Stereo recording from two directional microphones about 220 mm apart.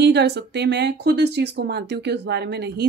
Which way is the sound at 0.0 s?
50° right (ahead or behind).